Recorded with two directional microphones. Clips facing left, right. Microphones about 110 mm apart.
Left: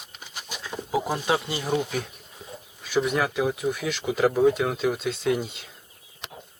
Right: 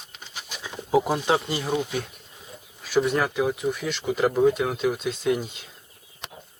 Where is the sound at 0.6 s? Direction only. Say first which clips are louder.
Right 5 dB; 15° right (ahead or behind).